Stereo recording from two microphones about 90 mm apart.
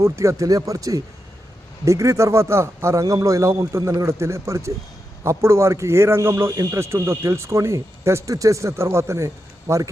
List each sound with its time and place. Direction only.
0.0 s a man's voice: 35° right (ahead or behind)